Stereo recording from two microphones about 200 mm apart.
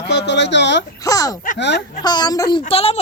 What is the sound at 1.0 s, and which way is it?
Speech, 15° left (ahead or behind).